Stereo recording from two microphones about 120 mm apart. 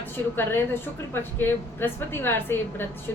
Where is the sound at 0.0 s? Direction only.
20° left (ahead or behind).